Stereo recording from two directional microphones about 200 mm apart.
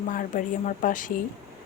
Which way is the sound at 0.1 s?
40° left (ahead or behind).